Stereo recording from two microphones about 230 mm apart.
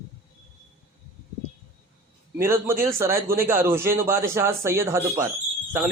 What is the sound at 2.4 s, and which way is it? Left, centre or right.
A man's voice, centre.